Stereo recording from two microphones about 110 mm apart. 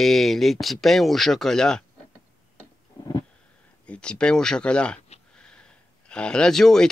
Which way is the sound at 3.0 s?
35° left (ahead or behind).